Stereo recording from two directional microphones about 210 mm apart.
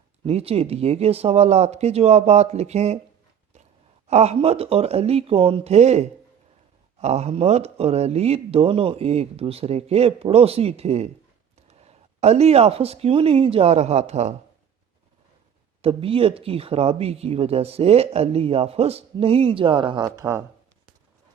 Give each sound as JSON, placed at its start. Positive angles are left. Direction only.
{"t": 0.3, "sound": "speech", "side_deg": -30}
{"t": 4.1, "sound": "speech", "side_deg": -30}
{"t": 15.8, "sound": "speech", "side_deg": -25}